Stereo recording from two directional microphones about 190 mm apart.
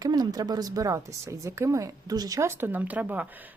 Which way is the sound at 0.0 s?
20° right (ahead or behind).